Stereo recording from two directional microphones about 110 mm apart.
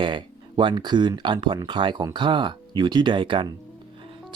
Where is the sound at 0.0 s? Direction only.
45° right (ahead or behind).